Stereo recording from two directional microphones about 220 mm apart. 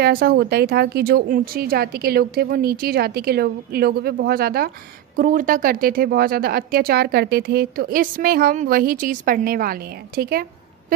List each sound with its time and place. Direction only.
0.0 s speech: 45° right (ahead or behind)